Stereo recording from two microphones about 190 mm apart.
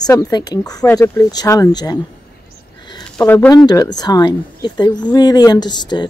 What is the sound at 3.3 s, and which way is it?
Speech, 15° left (ahead or behind).